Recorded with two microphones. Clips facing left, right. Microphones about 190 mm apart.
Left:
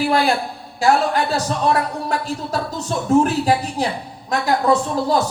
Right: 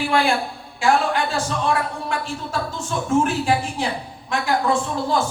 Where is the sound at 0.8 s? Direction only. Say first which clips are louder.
Left 2 dB; 40° left (ahead or behind).